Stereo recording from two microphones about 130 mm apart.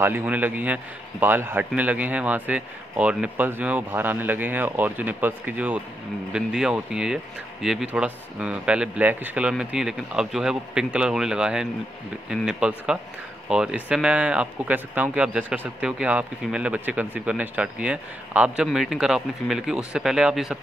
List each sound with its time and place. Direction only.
0.0 s speech: 15° right (ahead or behind)